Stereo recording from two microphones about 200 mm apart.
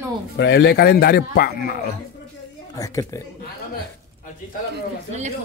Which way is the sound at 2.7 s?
15° left (ahead or behind).